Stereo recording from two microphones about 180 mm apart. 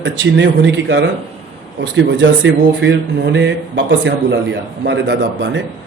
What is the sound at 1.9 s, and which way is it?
Speech, 90° right.